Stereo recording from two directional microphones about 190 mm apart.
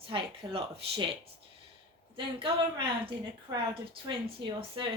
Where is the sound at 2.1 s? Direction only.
25° right (ahead or behind).